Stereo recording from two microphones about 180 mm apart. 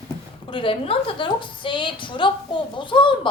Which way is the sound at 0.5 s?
30° left (ahead or behind).